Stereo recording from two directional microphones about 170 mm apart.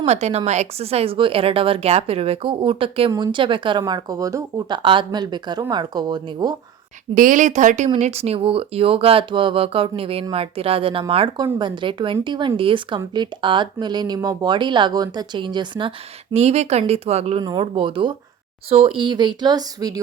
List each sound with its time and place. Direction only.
0.0 s a woman's voice: 40° right (ahead or behind); by 4.8 s 20° right (ahead or behind)
4.8 s speech: 30° right (ahead or behind)
7.1 s a woman's voice: 50° right (ahead or behind); by 15.9 s 25° right (ahead or behind)
16.3 s a woman's voice: 40° right (ahead or behind); by 20.0 s 20° right (ahead or behind)